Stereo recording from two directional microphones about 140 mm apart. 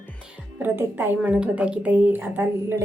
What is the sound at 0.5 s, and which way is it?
A woman's voice, 15° right (ahead or behind).